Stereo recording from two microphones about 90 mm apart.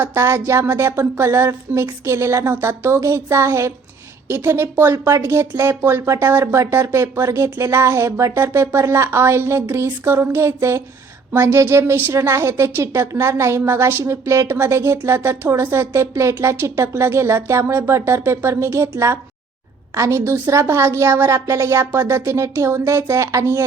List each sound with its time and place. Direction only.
0.0 s a woman's voice: 25° right (ahead or behind)